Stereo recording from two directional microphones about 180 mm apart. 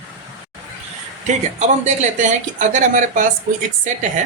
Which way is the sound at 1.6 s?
40° right (ahead or behind).